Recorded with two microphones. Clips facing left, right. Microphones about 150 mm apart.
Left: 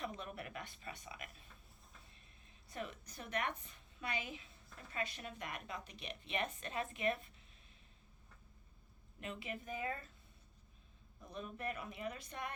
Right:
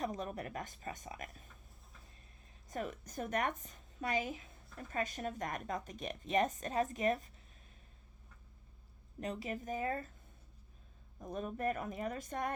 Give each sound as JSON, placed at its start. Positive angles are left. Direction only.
{"t": 0.0, "sound": "speech", "side_deg": -40}
{"t": 2.6, "sound": "a woman's voice", "side_deg": -45}
{"t": 9.2, "sound": "speech", "side_deg": -40}
{"t": 11.2, "sound": "a woman's voice", "side_deg": -45}